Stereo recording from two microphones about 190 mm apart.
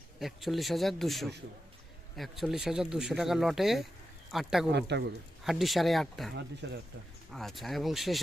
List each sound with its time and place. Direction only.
0.2 s speech: centre (ahead or behind)
4.7 s speech: 65° right (ahead or behind)
5.4 s speech: centre (ahead or behind)
6.3 s speech: 65° right (ahead or behind)
7.3 s speech: centre (ahead or behind)